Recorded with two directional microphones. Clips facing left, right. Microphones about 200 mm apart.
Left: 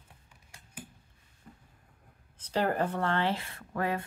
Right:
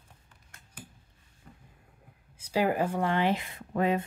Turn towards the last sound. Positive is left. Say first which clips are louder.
# right 5 dB
turn(degrees=-20)  # may be behind; listen again after turning